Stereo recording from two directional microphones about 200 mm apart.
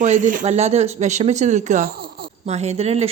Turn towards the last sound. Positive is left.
turn(degrees=-30)  # may be behind; listen again after turning